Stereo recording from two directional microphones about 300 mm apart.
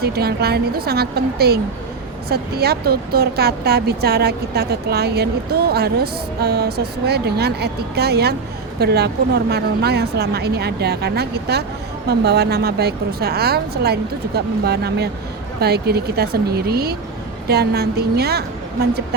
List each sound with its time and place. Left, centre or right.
0.0 s speech: right